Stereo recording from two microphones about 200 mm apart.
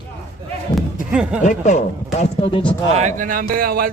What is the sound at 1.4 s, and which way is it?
Speech, 35° left (ahead or behind).